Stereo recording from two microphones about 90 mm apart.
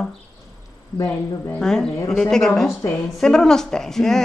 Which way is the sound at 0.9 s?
30° left (ahead or behind).